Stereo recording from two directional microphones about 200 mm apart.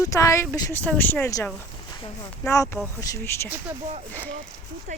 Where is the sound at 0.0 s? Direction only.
15° left (ahead or behind).